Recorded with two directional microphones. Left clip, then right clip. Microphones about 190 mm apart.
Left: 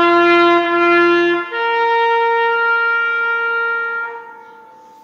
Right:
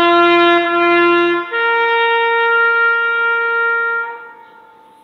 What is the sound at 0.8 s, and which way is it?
Trumpet, 10° left (ahead or behind).